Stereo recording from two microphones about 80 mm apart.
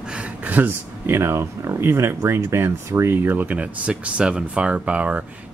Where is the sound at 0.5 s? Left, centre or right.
Right.